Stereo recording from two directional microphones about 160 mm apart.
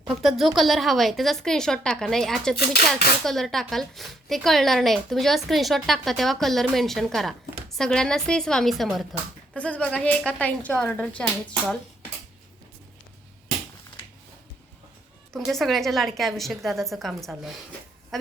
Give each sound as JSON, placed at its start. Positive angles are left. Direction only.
{"t": 0.0, "sound": "speech", "side_deg": 0}
{"t": 2.6, "sound": "speech", "side_deg": 75}
{"t": 3.2, "sound": "a woman's voice", "side_deg": 0}
{"t": 15.3, "sound": "speech", "side_deg": 0}